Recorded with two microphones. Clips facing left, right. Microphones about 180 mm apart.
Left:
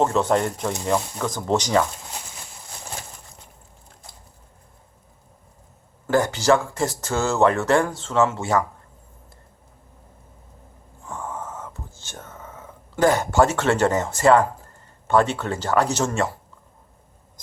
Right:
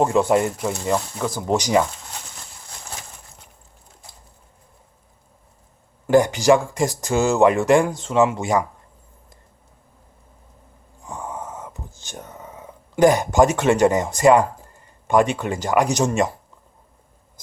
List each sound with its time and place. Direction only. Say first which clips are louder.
0.0 s speech: right 2 dB; 10° right (ahead or behind)
6.1 s speech: right 4 dB; 15° right (ahead or behind)
11.0 s whispering: right 1 dB; 15° right (ahead or behind)
15.0 s speech: right 2 dB; 15° right (ahead or behind)